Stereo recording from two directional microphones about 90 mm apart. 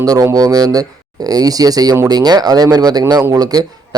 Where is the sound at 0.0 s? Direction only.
45° right (ahead or behind).